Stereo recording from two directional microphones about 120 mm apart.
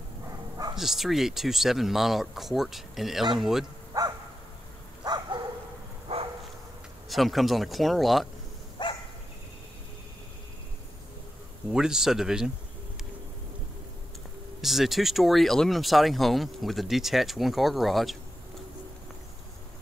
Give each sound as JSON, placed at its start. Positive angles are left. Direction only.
{"t": 0.7, "sound": "speech", "side_deg": 0}
{"t": 3.9, "sound": "dog", "side_deg": -30}
{"t": 6.1, "sound": "dog", "side_deg": -55}
{"t": 7.1, "sound": "speech", "side_deg": 0}
{"t": 8.8, "sound": "dog", "side_deg": 40}
{"t": 11.7, "sound": "speech", "side_deg": -5}
{"t": 14.6, "sound": "speech", "side_deg": 0}